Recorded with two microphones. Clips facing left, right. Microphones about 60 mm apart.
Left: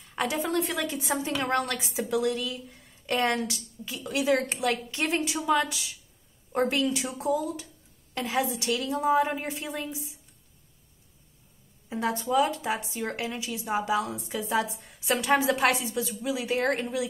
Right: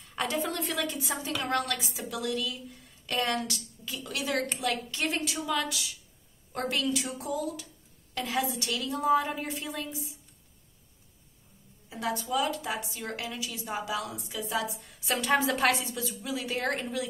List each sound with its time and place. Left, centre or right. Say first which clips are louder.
0.1 s a sound: left 2 dB; centre
0.4 s speech: left 3 dB; centre
0.9 s speech: left 4 dB; left
11.9 s speech: left 4 dB; left